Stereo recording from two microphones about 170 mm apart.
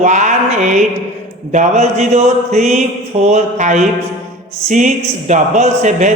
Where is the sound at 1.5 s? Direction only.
45° right (ahead or behind).